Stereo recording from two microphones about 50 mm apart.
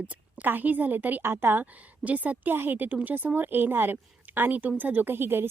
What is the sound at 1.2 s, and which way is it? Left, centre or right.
Speech, right.